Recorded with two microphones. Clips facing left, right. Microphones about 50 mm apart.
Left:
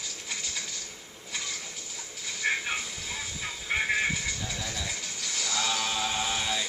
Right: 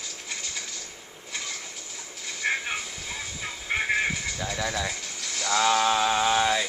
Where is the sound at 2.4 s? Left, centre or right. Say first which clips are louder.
Right 1 dB; centre.